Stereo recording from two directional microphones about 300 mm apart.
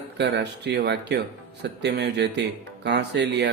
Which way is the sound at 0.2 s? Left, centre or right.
Right.